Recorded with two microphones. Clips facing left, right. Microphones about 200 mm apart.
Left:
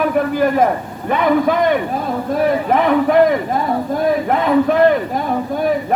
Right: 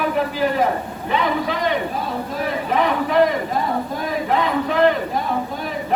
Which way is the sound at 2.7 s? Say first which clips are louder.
Left 3 dB; 55° left (ahead or behind).